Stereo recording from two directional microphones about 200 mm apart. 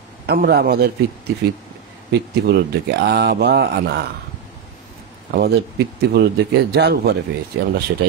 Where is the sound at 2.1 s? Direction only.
55° right (ahead or behind).